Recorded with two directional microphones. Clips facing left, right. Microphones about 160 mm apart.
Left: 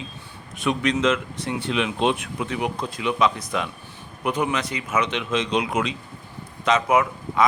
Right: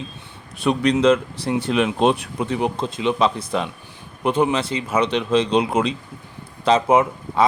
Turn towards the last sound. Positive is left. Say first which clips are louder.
# right 2 dB
turn(degrees=-30)  # may be behind; listen again after turning